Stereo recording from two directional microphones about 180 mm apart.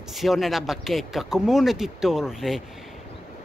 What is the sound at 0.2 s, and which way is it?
Speech, centre (ahead or behind).